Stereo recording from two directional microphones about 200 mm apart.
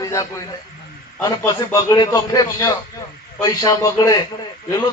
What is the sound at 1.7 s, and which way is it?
A man's voice, 20° left (ahead or behind).